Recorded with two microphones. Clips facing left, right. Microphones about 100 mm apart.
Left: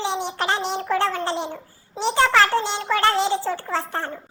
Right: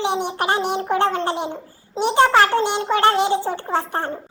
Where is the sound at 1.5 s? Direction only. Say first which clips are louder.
Right 6 dB; 20° right (ahead or behind).